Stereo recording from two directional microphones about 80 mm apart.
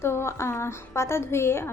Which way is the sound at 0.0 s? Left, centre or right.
Left.